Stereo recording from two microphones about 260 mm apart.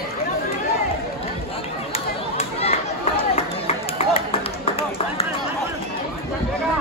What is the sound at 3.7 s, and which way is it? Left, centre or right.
Run, left.